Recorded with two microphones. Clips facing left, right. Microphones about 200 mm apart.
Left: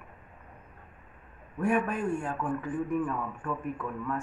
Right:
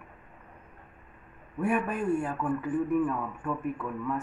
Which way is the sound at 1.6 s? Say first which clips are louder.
Even; 5° right (ahead or behind).